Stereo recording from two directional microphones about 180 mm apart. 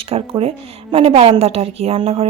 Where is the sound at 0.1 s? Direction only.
30° right (ahead or behind).